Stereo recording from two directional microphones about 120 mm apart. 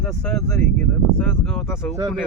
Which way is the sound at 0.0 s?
10° left (ahead or behind).